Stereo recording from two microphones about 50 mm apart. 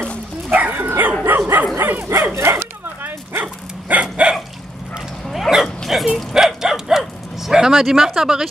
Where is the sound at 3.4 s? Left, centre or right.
Right.